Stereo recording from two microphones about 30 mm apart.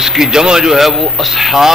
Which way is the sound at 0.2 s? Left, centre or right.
Right.